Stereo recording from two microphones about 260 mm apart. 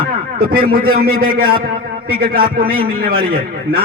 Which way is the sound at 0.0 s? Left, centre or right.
Right.